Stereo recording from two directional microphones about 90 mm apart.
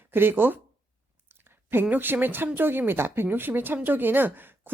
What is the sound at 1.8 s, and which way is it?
A woman's voice, 20° right (ahead or behind).